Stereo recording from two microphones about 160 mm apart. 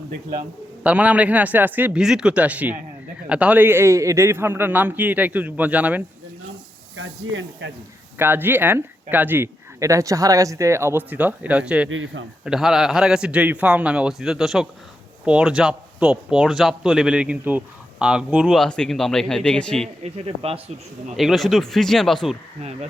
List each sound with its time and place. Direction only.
0.1 s a man's voice: 65° right (ahead or behind)
0.9 s speech: 10° right (ahead or behind)
7.6 s a man's voice: 90° right
8.2 s speech: 15° right (ahead or behind); by 19.9 s 5° left (ahead or behind)
20.0 s speech: 40° right (ahead or behind)
21.2 s speech: centre (ahead or behind)